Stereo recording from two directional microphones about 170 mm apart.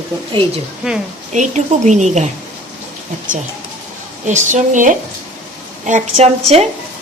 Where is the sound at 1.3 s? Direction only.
45° right (ahead or behind).